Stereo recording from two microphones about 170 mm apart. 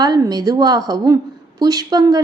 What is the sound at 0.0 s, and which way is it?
Speech, 25° right (ahead or behind).